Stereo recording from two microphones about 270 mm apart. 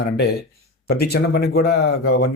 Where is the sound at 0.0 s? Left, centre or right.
Left.